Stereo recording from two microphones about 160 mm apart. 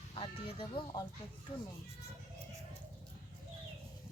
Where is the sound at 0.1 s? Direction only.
35° left (ahead or behind).